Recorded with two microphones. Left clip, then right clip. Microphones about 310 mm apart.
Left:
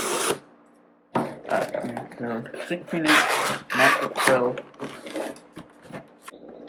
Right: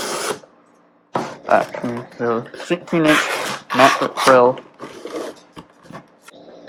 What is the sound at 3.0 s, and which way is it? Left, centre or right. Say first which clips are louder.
Speech: right 2 dB; centre.